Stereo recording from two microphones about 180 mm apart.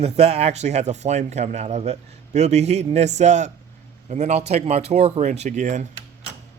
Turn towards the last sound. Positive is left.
turn(degrees=-45)  # may be behind; listen again after turning